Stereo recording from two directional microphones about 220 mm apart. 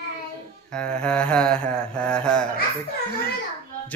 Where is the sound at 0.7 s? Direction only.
5° left (ahead or behind).